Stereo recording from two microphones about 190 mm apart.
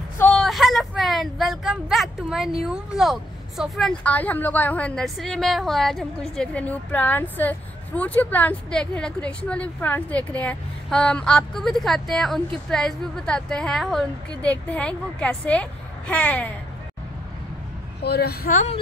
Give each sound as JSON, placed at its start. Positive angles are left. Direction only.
{"t": 0.2, "sound": "speech", "side_deg": 5}
{"t": 18.0, "sound": "speech", "side_deg": 60}